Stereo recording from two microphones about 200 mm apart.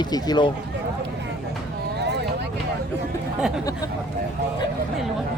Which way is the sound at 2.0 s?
55° right (ahead or behind).